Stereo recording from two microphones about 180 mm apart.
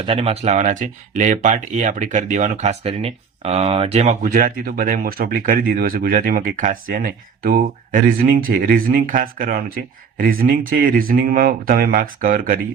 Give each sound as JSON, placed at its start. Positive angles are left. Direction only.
{"t": 0.0, "sound": "speech", "side_deg": -30}